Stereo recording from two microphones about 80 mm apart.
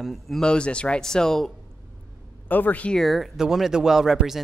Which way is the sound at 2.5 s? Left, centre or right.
Left.